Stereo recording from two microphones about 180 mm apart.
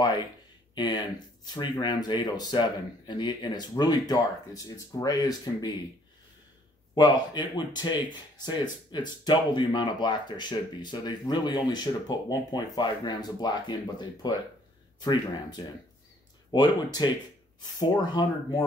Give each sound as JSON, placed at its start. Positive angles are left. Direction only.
{"t": 0.0, "sound": "speech", "side_deg": 25}
{"t": 7.0, "sound": "speech", "side_deg": 25}